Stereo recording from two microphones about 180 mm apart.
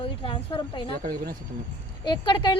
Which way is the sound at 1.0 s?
55° right (ahead or behind).